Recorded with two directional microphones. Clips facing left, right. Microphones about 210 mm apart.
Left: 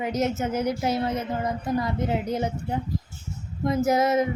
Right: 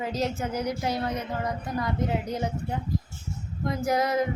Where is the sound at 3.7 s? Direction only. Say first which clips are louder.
Left 4 dB; 25° left (ahead or behind).